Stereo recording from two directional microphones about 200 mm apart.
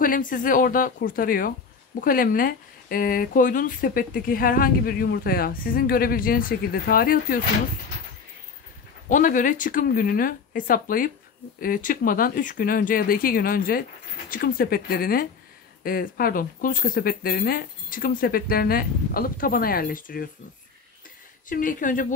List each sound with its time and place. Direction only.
0.0 s speech: 45° left (ahead or behind)
9.1 s speech: 40° left (ahead or behind)
21.5 s speech: 40° left (ahead or behind)